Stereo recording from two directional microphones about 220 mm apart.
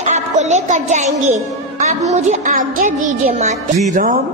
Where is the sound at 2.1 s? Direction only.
35° right (ahead or behind).